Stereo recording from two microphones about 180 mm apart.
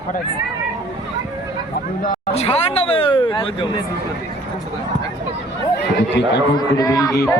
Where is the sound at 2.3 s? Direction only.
35° left (ahead or behind).